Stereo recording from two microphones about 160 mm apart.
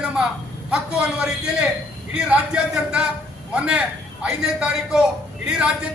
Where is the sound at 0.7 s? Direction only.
5° right (ahead or behind).